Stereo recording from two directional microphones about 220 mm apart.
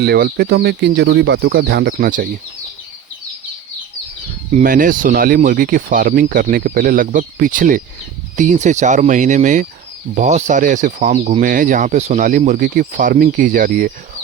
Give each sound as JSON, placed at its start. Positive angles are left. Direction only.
{"t": 0.0, "sound": "speech", "side_deg": -45}
{"t": 4.5, "sound": "speech", "side_deg": -40}